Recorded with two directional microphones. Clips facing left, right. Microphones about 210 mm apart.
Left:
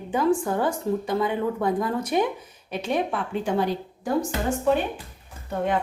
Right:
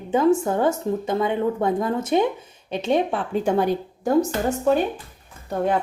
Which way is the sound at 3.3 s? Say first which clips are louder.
Right 5 dB; 50° right (ahead or behind).